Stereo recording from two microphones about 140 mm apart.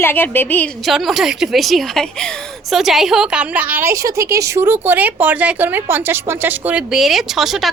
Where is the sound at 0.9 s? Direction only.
Centre (ahead or behind).